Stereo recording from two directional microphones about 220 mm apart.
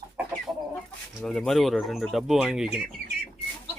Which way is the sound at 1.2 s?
Centre (ahead or behind).